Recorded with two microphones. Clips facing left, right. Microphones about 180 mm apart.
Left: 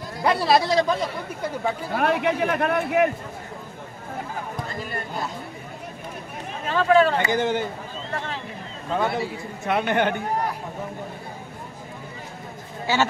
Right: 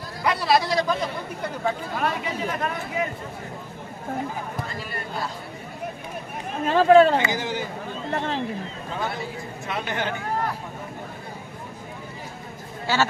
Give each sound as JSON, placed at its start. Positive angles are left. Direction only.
{"t": 0.2, "sound": "a man's voice", "side_deg": 25}
{"t": 2.0, "sound": "a man's voice", "side_deg": 65}
{"t": 6.7, "sound": "speech", "side_deg": -35}
{"t": 7.2, "sound": "a man's voice", "side_deg": 55}
{"t": 8.9, "sound": "a man's voice", "side_deg": 60}
{"t": 12.9, "sound": "speech", "side_deg": 20}